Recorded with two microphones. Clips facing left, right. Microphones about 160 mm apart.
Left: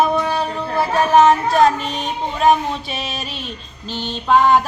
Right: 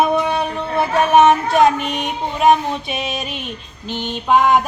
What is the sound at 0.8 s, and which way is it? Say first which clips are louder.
Child singing: right 1 dB; 20° right (ahead or behind).